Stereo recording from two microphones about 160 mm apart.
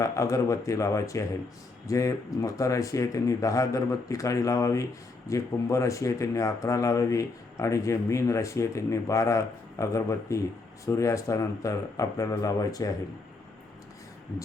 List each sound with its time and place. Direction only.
0.0 s speech: 20° left (ahead or behind)